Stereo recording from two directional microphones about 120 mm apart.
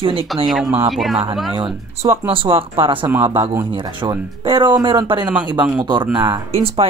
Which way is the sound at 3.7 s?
45° right (ahead or behind).